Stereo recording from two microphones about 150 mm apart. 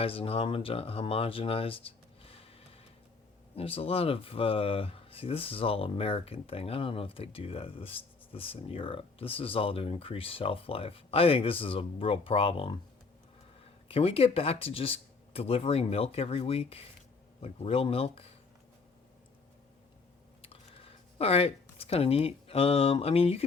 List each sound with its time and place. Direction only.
0.0 s speech: 40° left (ahead or behind)
13.8 s speech: 40° left (ahead or behind)
20.4 s speech: 40° left (ahead or behind)